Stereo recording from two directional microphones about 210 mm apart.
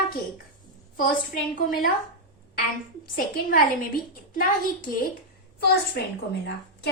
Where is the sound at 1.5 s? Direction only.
45° left (ahead or behind).